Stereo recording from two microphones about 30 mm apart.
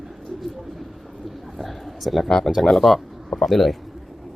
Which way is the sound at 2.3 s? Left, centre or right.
Centre.